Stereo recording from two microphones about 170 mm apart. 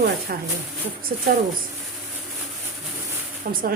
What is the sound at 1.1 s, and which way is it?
Speech, 50° right (ahead or behind).